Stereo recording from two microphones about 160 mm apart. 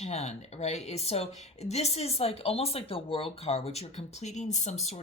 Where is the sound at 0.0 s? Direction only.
45° left (ahead or behind).